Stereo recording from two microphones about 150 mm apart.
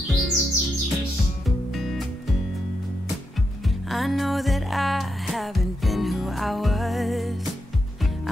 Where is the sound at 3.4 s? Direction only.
Centre (ahead or behind).